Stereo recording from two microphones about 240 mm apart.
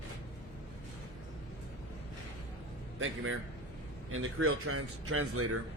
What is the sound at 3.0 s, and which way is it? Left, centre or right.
Speech, right.